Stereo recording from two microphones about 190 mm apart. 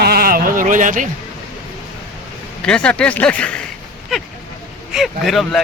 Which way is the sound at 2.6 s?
5° left (ahead or behind).